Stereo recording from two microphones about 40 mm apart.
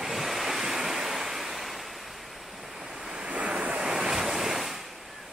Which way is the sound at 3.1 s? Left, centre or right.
Right.